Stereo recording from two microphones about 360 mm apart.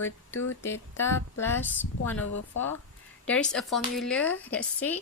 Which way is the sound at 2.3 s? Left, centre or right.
Left.